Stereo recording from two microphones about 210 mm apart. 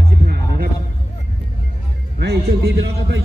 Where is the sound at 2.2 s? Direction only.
50° right (ahead or behind).